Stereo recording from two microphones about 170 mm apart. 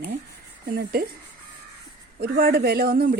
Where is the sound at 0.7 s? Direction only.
65° right (ahead or behind).